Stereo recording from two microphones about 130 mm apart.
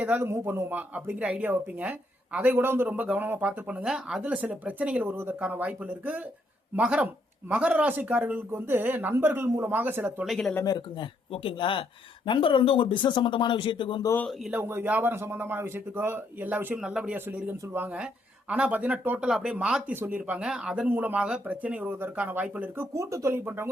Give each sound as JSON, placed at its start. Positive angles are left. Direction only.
{"t": 0.0, "sound": "speech", "side_deg": -15}
{"t": 10.2, "sound": "speech", "side_deg": 0}
{"t": 10.5, "sound": "speech", "side_deg": 25}
{"t": 11.3, "sound": "speech", "side_deg": 40}
{"t": 14.5, "sound": "speech", "side_deg": -15}